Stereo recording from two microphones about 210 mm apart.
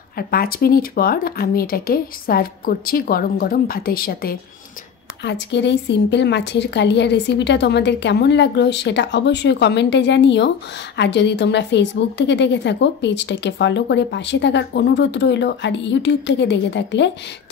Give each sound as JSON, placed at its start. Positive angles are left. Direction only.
{"t": 0.3, "sound": "speech", "side_deg": 45}
{"t": 5.2, "sound": "a woman's voice", "side_deg": 55}